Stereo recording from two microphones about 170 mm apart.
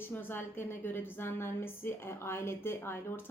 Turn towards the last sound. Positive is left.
turn(degrees=15)  # may be behind; listen again after turning